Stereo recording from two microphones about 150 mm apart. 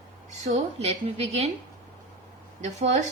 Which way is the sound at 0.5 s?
45° right (ahead or behind).